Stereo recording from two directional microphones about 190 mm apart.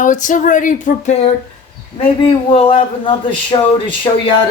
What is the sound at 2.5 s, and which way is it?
Speech, 30° left (ahead or behind).